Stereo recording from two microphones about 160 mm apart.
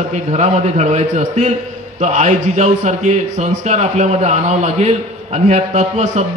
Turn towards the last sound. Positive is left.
turn(degrees=-45)  # may be behind; listen again after turning